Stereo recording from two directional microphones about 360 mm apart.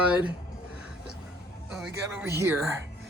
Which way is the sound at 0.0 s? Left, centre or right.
Centre.